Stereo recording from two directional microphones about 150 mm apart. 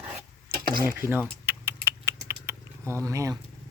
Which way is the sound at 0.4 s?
65° right (ahead or behind).